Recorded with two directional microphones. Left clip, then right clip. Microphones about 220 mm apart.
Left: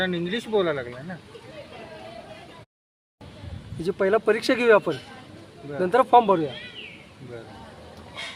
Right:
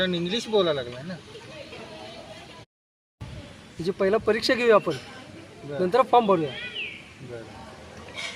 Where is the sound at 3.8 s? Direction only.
10° left (ahead or behind).